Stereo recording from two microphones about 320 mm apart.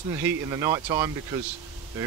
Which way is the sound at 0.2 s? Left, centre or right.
Centre.